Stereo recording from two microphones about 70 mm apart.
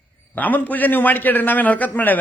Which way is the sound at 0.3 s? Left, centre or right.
Left.